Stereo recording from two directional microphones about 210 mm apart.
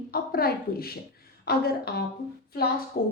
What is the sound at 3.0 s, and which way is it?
Speech, 45° left (ahead or behind).